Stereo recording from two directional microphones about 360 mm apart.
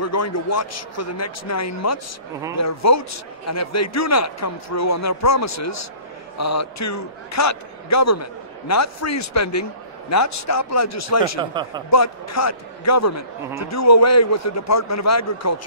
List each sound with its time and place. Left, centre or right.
0.0 s a man's voice: left
11.6 s speech: centre
11.9 s a man's voice: left